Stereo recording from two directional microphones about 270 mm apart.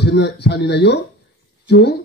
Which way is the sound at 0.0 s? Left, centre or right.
Left.